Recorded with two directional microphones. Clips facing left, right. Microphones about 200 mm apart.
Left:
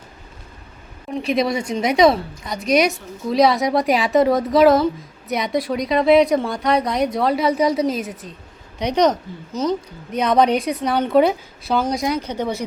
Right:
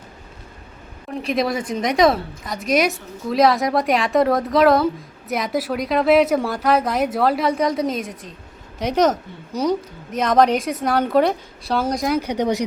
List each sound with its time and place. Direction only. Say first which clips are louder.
1.2 s a woman's voice: left 1 dB; centre (ahead or behind)
10.2 s a woman's voice: even; centre (ahead or behind)
12.2 s a woman's voice: right 3 dB; 15° right (ahead or behind)